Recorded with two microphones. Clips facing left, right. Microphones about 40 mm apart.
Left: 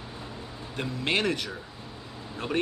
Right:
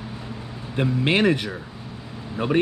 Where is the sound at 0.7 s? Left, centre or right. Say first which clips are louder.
Right 7 dB; right.